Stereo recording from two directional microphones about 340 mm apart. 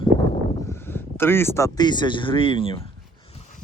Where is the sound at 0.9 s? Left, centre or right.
Centre.